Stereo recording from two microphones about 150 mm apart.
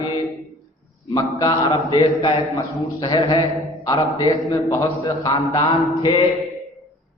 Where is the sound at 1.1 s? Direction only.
25° left (ahead or behind).